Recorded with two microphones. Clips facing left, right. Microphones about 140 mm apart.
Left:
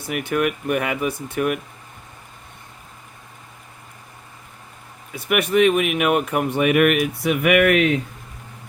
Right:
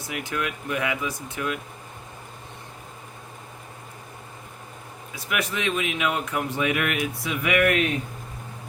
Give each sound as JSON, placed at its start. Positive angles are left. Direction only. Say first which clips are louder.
{"t": 0.1, "sound": "speech", "louder": "left 8 dB", "side_deg": 60}
{"t": 5.1, "sound": "speech", "louder": "left 10 dB", "side_deg": 60}